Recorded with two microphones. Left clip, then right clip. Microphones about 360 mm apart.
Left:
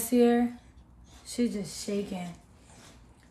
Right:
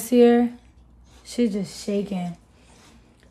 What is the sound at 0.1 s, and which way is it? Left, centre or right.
A woman's voice, right.